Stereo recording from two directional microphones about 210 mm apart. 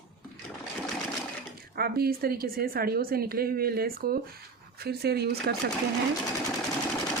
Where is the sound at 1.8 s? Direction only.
45° right (ahead or behind).